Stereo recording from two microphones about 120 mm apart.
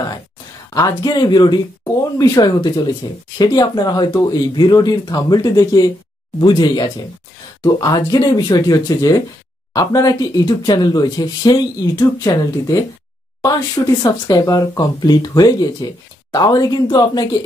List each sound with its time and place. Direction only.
0.7 s speech: 35° left (ahead or behind)
14.0 s speech: 30° left (ahead or behind)